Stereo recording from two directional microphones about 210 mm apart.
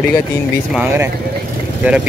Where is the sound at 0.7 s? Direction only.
5° right (ahead or behind).